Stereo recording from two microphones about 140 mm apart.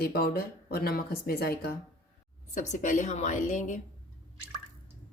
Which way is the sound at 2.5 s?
60° left (ahead or behind).